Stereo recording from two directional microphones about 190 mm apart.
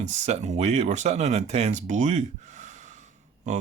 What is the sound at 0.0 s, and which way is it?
Speech, 40° right (ahead or behind).